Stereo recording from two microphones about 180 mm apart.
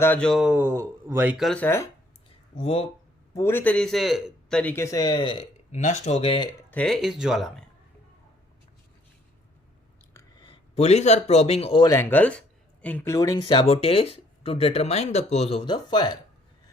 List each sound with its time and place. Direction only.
0.0 s speech: 10° left (ahead or behind)
2.6 s speech: 30° left (ahead or behind)
3.3 s a man's voice: 10° left (ahead or behind); by 6.5 s 30° left (ahead or behind)
6.7 s speech: 5° left (ahead or behind)
10.4 s a man's voice: 35° left (ahead or behind)
11.9 s speech: 15° left (ahead or behind)